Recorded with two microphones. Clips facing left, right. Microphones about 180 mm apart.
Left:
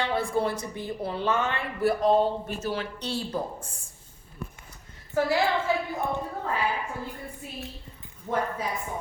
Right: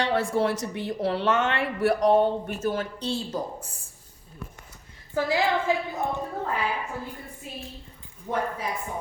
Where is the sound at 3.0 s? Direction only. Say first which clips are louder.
Right 2 dB; 30° right (ahead or behind).